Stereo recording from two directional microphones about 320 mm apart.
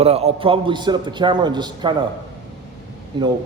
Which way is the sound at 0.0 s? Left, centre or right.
Centre.